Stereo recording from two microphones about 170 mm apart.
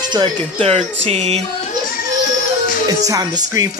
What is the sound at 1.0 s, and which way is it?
Music, 35° right (ahead or behind).